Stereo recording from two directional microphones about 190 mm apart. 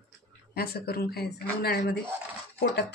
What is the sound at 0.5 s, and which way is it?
Speech, 55° left (ahead or behind).